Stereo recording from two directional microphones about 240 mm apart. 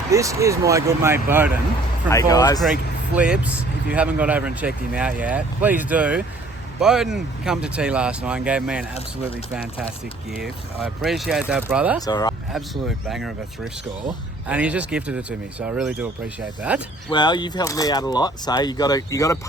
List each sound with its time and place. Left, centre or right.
0.1 s speech: centre
2.0 s speech: centre
3.2 s speech: centre
10.4 s speech: centre
11.9 s speech: centre
12.5 s speech: centre
14.4 s speech: centre
17.1 s speech: centre